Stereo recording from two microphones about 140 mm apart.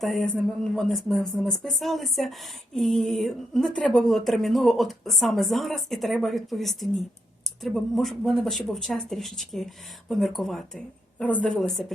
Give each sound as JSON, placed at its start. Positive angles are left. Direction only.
{"t": 0.0, "sound": "speech", "side_deg": 0}